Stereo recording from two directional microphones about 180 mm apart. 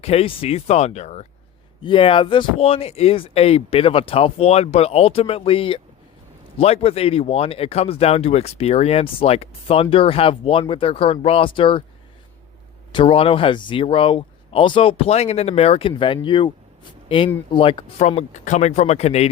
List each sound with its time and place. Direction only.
0.0 s speech: 35° left (ahead or behind)
12.9 s speech: 30° left (ahead or behind)